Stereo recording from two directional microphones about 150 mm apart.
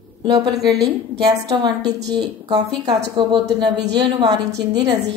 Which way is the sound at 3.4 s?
90° right.